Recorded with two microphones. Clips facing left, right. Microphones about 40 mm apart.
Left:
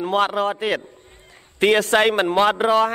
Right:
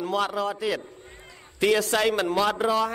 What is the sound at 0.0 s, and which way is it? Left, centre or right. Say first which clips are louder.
A man's voice: left 6 dB; left.